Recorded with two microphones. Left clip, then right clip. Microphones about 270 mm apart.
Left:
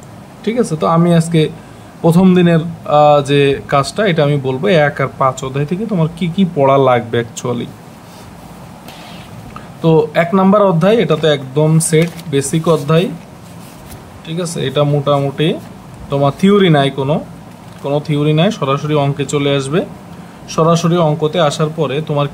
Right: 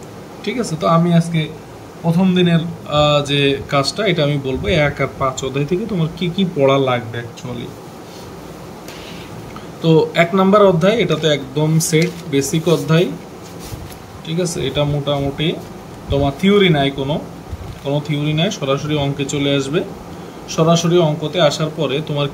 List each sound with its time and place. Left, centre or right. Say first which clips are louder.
0.5 s speech: left 3 dB; centre
9.8 s speech: left 2 dB; centre
14.2 s speech: left 1 dB; centre